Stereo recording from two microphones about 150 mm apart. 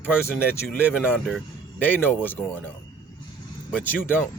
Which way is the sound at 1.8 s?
15° left (ahead or behind).